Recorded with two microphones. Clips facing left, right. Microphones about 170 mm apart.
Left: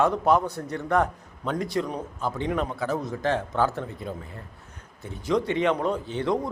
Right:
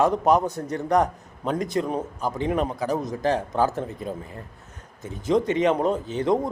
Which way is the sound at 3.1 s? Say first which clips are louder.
Right 2 dB; 40° right (ahead or behind).